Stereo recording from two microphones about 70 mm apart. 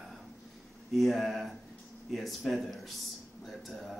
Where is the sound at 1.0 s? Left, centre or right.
Centre.